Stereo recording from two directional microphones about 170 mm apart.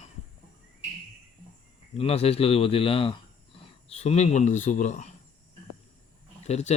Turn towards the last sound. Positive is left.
turn(degrees=40)  # may be behind; listen again after turning